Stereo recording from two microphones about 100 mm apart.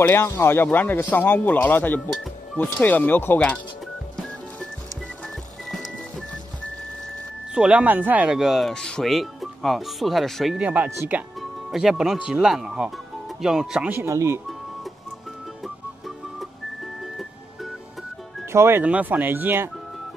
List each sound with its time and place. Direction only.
0.0 s speech: 25° left (ahead or behind)
5.7 s music: centre (ahead or behind)
7.5 s speech: 10° right (ahead or behind)
10.6 s speech: 15° right (ahead or behind)
13.9 s speech: 30° right (ahead or behind)
18.5 s speech: 25° right (ahead or behind)